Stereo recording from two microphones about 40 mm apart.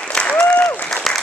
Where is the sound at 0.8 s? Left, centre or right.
Centre.